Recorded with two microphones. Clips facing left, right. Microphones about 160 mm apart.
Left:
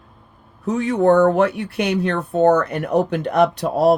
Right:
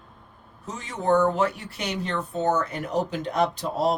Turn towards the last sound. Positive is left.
turn(degrees=65)  # may be behind; listen again after turning